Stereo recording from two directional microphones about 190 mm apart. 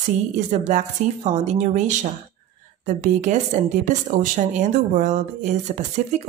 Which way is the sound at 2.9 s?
40° right (ahead or behind).